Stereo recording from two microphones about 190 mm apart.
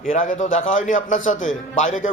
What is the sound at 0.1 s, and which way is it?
A man's voice, 40° left (ahead or behind).